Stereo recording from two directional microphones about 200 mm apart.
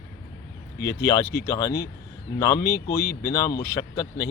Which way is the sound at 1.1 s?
15° left (ahead or behind).